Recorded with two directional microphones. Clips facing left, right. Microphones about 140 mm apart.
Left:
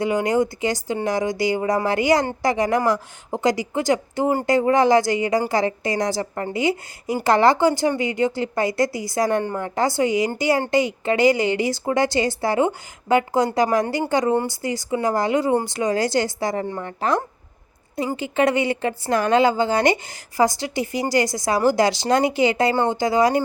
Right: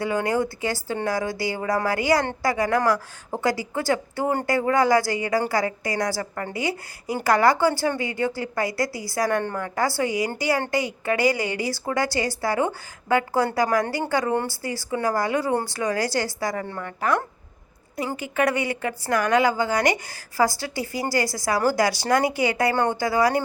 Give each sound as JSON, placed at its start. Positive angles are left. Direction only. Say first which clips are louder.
{"t": 0.0, "sound": "speech", "louder": "left 4 dB", "side_deg": 20}
{"t": 18.2, "sound": "speech", "louder": "left 4 dB", "side_deg": 25}